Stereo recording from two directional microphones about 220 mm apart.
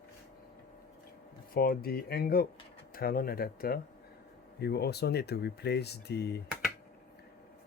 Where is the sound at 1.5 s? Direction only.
45° left (ahead or behind).